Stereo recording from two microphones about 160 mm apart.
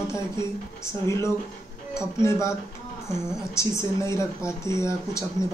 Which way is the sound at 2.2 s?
20° left (ahead or behind).